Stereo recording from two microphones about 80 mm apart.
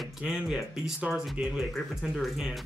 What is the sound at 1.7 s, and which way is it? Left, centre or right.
Speech, centre.